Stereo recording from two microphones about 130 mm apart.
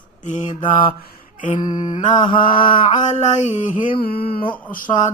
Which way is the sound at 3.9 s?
45° left (ahead or behind).